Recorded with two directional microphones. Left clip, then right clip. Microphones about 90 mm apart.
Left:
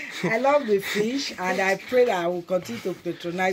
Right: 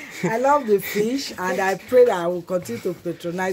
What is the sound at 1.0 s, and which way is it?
Speech, 60° right (ahead or behind).